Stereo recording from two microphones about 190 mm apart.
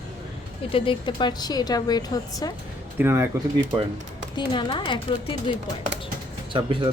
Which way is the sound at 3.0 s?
15° right (ahead or behind).